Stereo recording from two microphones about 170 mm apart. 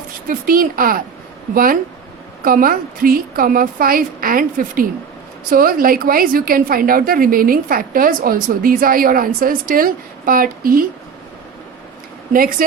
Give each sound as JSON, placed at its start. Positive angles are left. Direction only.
{"t": 0.3, "sound": "a woman's voice", "side_deg": -55}
{"t": 12.3, "sound": "speech", "side_deg": -55}